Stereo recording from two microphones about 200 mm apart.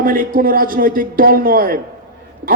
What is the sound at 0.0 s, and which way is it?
A woman's voice, 45° right (ahead or behind).